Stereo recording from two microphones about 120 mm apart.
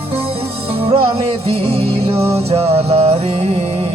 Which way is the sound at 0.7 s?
55° right (ahead or behind).